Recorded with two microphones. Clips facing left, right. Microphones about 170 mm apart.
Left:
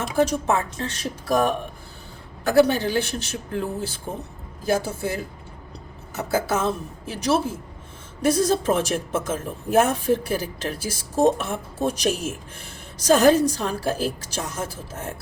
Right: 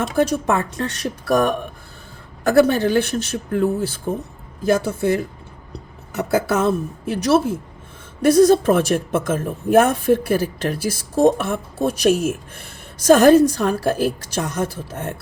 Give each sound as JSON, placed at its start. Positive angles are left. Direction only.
{"t": 0.0, "sound": "speech", "side_deg": -60}
{"t": 2.4, "sound": "speech", "side_deg": -50}
{"t": 8.2, "sound": "speech", "side_deg": -60}